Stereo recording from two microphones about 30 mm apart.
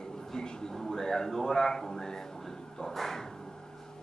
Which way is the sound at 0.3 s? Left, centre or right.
Centre.